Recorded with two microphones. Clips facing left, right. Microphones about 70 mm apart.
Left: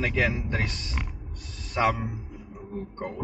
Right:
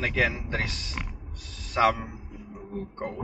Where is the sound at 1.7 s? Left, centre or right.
Centre.